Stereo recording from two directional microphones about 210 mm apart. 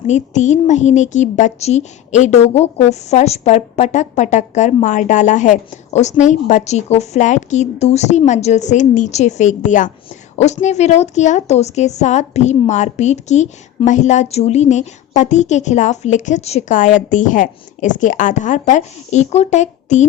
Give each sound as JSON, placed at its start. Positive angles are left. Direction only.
{"t": 0.1, "sound": "a woman's voice", "side_deg": 35}